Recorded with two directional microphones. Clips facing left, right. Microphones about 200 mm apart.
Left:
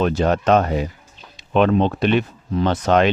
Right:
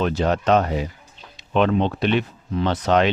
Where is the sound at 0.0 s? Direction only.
50° left (ahead or behind).